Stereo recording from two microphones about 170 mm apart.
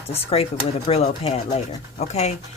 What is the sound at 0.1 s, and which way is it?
Speech, 35° left (ahead or behind).